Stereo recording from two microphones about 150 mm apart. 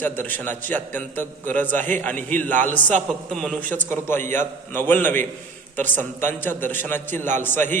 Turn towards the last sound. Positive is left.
turn(degrees=15)  # may be behind; listen again after turning